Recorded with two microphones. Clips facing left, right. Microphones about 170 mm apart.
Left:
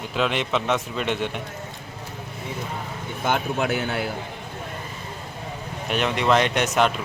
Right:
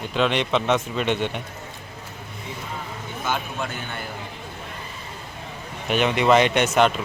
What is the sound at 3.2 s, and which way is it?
Speech, 65° left (ahead or behind).